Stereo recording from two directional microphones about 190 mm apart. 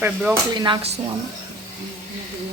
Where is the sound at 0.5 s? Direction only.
25° right (ahead or behind).